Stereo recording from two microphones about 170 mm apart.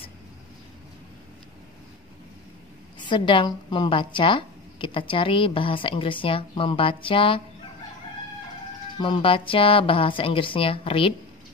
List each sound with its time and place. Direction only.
3.1 s a woman's voice: 30° left (ahead or behind)
8.9 s a woman's voice: 30° left (ahead or behind)